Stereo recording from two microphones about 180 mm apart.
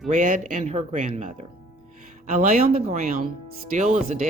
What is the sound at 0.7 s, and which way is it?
Speech, 35° right (ahead or behind).